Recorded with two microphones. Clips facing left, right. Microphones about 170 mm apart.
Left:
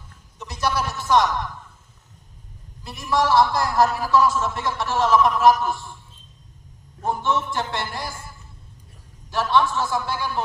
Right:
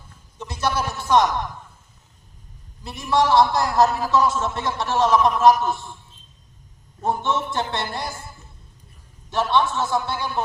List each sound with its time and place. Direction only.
0.3 s bleat: 30° right (ahead or behind)
0.7 s a man's voice: 25° right (ahead or behind)
2.8 s a man's voice: 20° right (ahead or behind)
7.0 s a man's voice: 25° right (ahead or behind)
9.3 s a man's voice: 20° right (ahead or behind)